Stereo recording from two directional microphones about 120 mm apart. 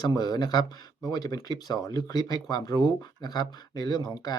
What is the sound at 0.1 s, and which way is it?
A man's voice, 35° left (ahead or behind).